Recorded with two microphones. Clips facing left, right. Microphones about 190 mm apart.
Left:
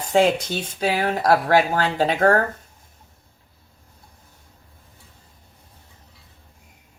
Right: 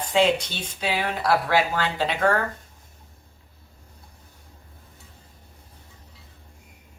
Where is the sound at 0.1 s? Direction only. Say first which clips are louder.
Left 3 dB; 45° left (ahead or behind).